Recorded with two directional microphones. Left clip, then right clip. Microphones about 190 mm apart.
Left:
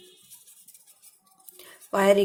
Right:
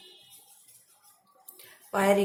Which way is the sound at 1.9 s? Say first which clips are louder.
Left 4 dB; 50° left (ahead or behind).